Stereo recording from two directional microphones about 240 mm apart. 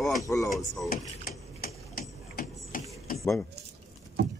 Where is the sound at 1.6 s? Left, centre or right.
Left.